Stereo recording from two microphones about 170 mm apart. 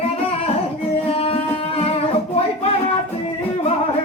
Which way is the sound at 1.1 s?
35° left (ahead or behind).